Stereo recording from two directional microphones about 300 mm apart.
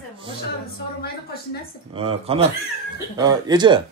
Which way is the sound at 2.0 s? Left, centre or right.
Centre.